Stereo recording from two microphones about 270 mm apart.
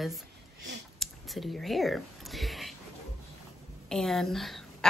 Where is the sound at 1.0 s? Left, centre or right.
Centre.